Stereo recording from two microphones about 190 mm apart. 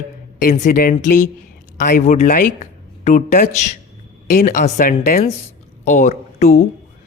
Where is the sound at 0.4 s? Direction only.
40° left (ahead or behind).